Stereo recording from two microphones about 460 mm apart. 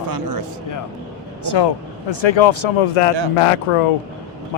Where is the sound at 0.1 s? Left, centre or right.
Right.